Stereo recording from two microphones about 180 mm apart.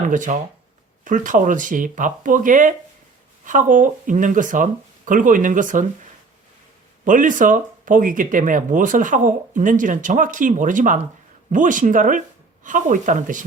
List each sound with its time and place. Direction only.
0.1 s speech: 45° right (ahead or behind)
7.0 s speech: 45° right (ahead or behind)